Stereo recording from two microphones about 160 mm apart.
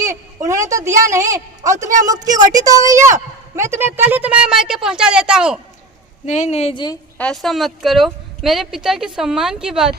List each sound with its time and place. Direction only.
0.0 s a woman's voice: 20° right (ahead or behind)
6.2 s speech: 45° left (ahead or behind)
7.2 s speech: 5° left (ahead or behind)